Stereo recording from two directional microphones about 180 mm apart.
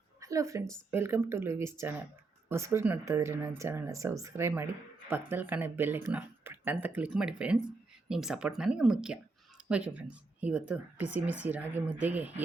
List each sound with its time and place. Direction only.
0.2 s a woman's voice: 15° right (ahead or behind)
6.1 s a sound: 10° right (ahead or behind)
6.8 s speech: 10° right (ahead or behind)